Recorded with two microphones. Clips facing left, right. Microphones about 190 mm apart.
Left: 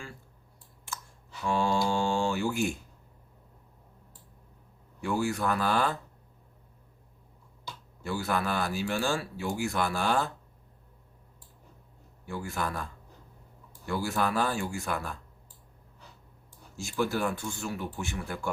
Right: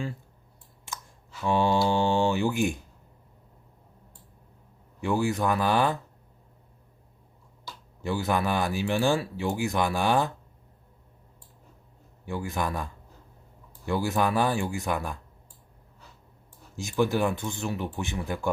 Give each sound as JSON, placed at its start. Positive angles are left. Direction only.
{"t": 1.5, "sound": "mantra", "side_deg": -20}
{"t": 1.9, "sound": "speech", "side_deg": -20}
{"t": 4.9, "sound": "a man's voice", "side_deg": -15}
{"t": 8.0, "sound": "a man's voice", "side_deg": -15}
{"t": 12.2, "sound": "a man's voice", "side_deg": -15}
{"t": 16.7, "sound": "a man's voice", "side_deg": -15}